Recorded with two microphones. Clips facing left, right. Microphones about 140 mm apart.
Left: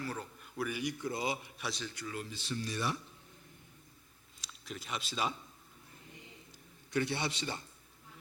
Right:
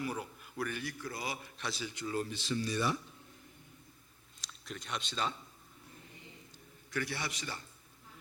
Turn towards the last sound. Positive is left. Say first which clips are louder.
# left 4 dB
turn(degrees=25)  # may be behind; listen again after turning